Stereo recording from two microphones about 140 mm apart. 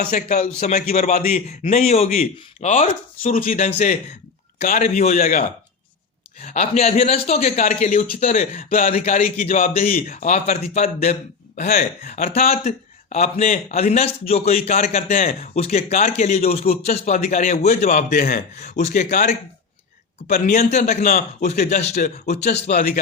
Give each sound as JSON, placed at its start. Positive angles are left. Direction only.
{"t": 0.1, "sound": "a man's voice", "side_deg": 65}
{"t": 0.9, "sound": "a man's voice", "side_deg": 55}
{"t": 3.7, "sound": "a man's voice", "side_deg": 50}
{"t": 4.6, "sound": "a man's voice", "side_deg": 70}
{"t": 6.4, "sound": "a man's voice", "side_deg": 60}
{"t": 8.1, "sound": "a man's voice", "side_deg": 70}
{"t": 8.9, "sound": "a man's voice", "side_deg": 50}
{"t": 10.2, "sound": "a man's voice", "side_deg": 65}
{"t": 12.3, "sound": "a man's voice", "side_deg": 50}
{"t": 15.5, "sound": "a man's voice", "side_deg": 50}
{"t": 21.7, "sound": "a man's voice", "side_deg": 55}
{"t": 22.7, "sound": "speech", "side_deg": 90}